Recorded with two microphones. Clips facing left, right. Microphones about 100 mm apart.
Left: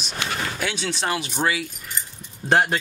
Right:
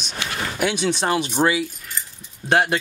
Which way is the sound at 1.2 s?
30° right (ahead or behind).